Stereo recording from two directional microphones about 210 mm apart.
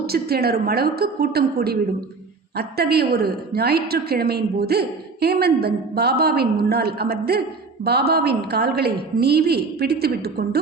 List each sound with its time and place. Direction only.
0.0 s a woman's voice: 50° right (ahead or behind)